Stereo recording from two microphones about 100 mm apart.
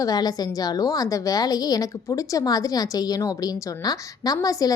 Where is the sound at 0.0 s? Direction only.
40° left (ahead or behind).